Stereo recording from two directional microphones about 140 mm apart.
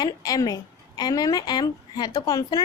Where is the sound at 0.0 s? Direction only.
25° left (ahead or behind).